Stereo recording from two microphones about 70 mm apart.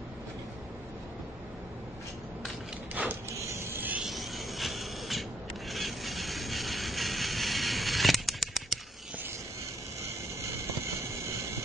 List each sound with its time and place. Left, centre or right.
3.1 s printer: right
4.0 s a sound: centre
10.0 s vehicle: right